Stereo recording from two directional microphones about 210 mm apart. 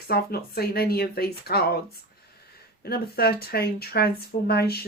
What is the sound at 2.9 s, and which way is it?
Speech, 45° left (ahead or behind).